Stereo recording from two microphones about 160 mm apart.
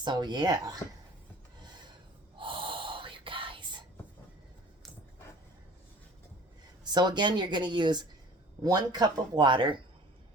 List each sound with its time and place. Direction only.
0.0 s speech: 30° right (ahead or behind)
2.4 s gasp: 30° right (ahead or behind)
6.8 s speech: 25° right (ahead or behind)